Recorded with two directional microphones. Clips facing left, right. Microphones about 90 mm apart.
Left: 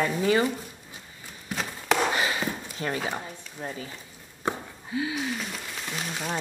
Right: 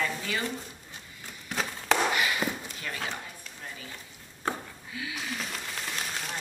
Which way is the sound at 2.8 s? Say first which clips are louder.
Left 9 dB; 35° left (ahead or behind).